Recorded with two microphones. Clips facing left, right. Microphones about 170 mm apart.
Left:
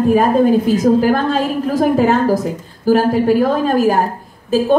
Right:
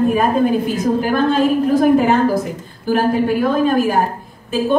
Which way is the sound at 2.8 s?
40° left (ahead or behind).